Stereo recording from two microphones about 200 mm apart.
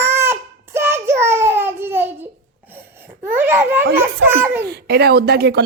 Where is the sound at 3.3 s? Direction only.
10° right (ahead or behind).